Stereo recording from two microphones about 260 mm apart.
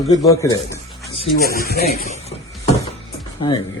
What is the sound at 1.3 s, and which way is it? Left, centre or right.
Speech, left.